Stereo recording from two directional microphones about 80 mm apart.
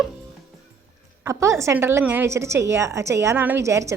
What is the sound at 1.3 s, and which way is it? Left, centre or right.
A woman's voice, right.